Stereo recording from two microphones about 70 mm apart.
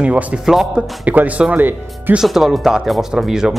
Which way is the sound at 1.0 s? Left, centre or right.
Right.